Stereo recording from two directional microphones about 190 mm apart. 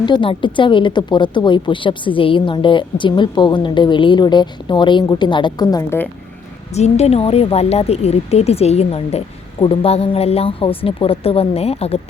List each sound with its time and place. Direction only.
0.0 s a woman's voice: 25° left (ahead or behind)
6.7 s speech: 35° left (ahead or behind)